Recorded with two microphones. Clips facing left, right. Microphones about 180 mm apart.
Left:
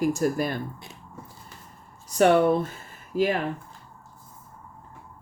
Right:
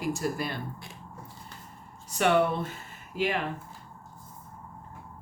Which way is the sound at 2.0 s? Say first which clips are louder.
Left 5 dB; 40° left (ahead or behind).